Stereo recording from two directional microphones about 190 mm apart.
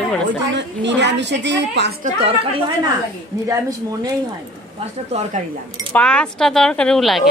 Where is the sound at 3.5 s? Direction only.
20° right (ahead or behind).